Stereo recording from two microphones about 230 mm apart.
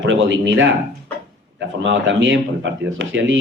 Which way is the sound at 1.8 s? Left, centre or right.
Right.